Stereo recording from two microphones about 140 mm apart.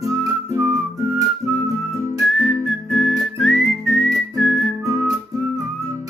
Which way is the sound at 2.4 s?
5° left (ahead or behind).